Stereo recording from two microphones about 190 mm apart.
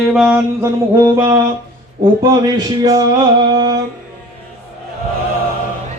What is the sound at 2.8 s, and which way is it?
Music, 20° right (ahead or behind).